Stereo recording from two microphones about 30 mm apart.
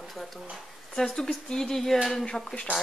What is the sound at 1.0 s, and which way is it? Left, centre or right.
Speech, centre.